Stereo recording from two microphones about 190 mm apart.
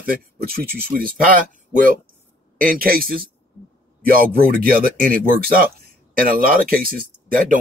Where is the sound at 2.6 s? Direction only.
50° right (ahead or behind).